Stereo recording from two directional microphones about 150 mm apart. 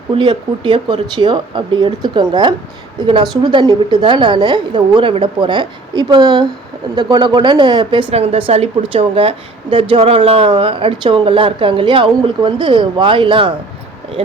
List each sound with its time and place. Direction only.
0.1 s a woman's voice: 35° right (ahead or behind)